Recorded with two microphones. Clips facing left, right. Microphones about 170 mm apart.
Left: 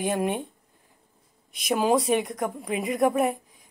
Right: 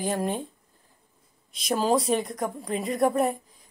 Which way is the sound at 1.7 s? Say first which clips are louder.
Left 1 dB; 15° left (ahead or behind).